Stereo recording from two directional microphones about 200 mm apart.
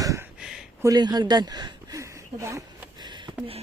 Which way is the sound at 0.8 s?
20° right (ahead or behind).